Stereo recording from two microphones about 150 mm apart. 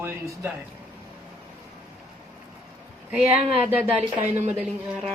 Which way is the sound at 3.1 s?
10° right (ahead or behind).